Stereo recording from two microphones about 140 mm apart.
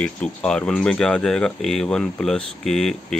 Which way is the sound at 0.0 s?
10° left (ahead or behind).